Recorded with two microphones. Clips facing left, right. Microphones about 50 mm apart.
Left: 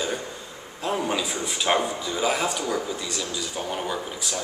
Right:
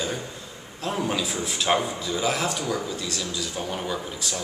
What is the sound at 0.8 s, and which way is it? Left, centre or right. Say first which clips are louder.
A man's voice: left 1 dB; centre.